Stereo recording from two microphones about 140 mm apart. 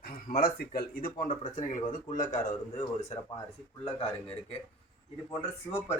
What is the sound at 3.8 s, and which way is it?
Speech, 45° left (ahead or behind).